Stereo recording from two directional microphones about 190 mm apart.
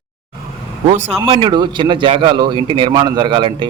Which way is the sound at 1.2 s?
30° right (ahead or behind).